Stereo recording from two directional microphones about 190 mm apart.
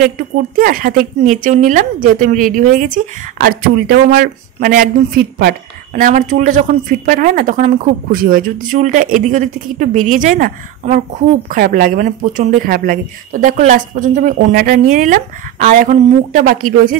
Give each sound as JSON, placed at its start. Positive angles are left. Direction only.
{"t": 0.6, "sound": "speech", "side_deg": -50}